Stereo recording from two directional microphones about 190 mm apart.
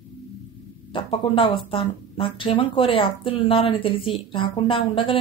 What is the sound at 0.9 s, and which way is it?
Speech, 30° left (ahead or behind).